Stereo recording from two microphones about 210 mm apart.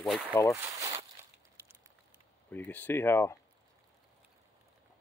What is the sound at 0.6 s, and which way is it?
Speech, 15° right (ahead or behind).